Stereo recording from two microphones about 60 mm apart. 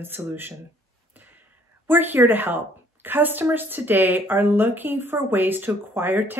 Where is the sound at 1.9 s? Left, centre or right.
Right.